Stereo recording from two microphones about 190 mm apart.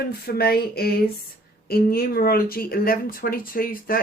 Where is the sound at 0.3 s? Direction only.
55° left (ahead or behind).